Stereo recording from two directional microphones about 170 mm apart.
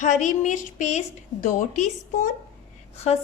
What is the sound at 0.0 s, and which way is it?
A woman's voice, 45° left (ahead or behind).